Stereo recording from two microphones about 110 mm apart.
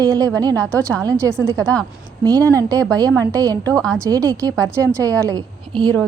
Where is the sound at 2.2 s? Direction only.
35° right (ahead or behind).